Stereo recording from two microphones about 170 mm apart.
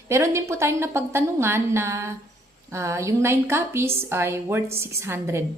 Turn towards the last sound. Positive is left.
turn(degrees=-15)  # may be behind; listen again after turning